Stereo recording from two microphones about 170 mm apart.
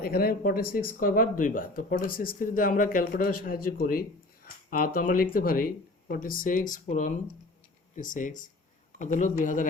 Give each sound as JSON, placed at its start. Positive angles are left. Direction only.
{"t": 0.0, "sound": "speech", "side_deg": 60}